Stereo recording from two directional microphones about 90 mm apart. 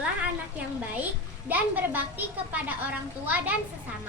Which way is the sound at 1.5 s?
20° right (ahead or behind).